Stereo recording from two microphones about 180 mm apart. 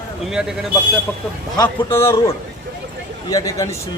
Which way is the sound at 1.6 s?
15° left (ahead or behind).